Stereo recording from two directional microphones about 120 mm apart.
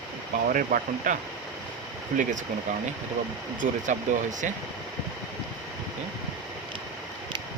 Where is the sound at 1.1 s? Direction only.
90° right.